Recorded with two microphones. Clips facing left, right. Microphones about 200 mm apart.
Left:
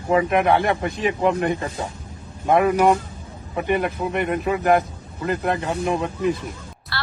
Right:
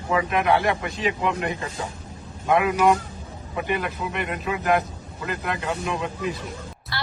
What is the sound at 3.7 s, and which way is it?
Speech, 50° left (ahead or behind).